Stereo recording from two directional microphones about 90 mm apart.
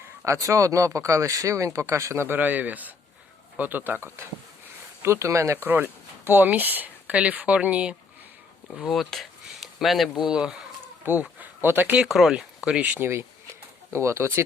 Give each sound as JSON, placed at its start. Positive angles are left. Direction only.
{"t": 0.3, "sound": "speech", "side_deg": -35}
{"t": 5.6, "sound": "speech", "side_deg": -20}
{"t": 8.7, "sound": "speech", "side_deg": 0}
{"t": 11.0, "sound": "speech", "side_deg": -20}
{"t": 12.0, "sound": "speech", "side_deg": -5}